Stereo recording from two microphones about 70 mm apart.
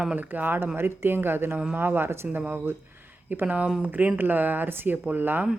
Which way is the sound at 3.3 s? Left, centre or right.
Right.